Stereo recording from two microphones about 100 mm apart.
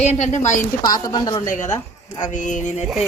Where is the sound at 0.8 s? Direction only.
45° left (ahead or behind).